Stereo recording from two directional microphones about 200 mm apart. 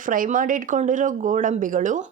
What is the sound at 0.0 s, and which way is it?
Speech, 40° right (ahead or behind).